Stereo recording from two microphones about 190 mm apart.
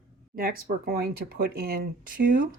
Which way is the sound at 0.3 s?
50° right (ahead or behind).